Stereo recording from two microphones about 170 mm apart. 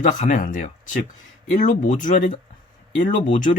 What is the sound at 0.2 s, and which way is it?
Speech, 45° left (ahead or behind).